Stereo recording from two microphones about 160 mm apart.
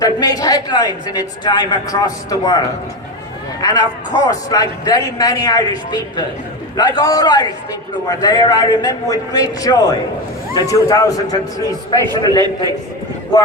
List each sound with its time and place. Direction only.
0.0 s a man's voice: 25° left (ahead or behind)